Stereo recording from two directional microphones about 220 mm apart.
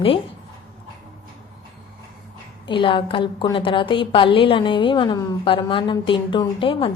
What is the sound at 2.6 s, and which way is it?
A woman's voice, 20° left (ahead or behind).